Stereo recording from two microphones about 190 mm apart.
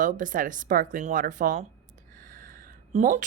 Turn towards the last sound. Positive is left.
turn(degrees=-40)  # may be behind; listen again after turning